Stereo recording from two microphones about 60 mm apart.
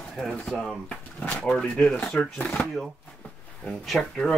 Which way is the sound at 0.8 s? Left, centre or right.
Left.